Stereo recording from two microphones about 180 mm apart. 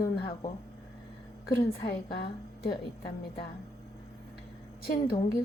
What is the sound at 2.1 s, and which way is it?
Speech, 60° left (ahead or behind).